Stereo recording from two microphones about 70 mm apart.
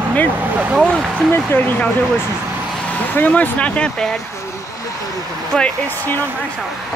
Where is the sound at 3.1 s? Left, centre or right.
Left.